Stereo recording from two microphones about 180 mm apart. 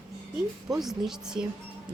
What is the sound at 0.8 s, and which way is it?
Speech, centre (ahead or behind).